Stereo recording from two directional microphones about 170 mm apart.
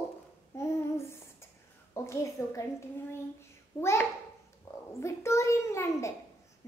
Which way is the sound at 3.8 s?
15° left (ahead or behind).